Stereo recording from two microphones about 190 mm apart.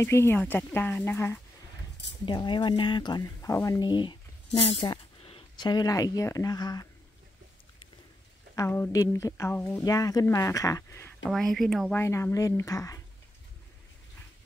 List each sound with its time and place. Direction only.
0.0 s a woman's voice: 15° left (ahead or behind)
2.2 s speech: 25° left (ahead or behind)
8.5 s a woman's voice: 10° left (ahead or behind)
11.2 s speech: centre (ahead or behind)
12.0 s a woman's voice: 15° left (ahead or behind)